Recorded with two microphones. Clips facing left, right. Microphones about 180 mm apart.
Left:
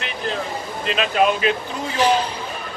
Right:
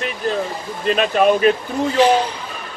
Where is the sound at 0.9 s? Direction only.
45° right (ahead or behind).